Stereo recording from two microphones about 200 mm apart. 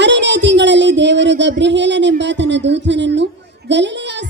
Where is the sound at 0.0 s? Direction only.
60° right (ahead or behind).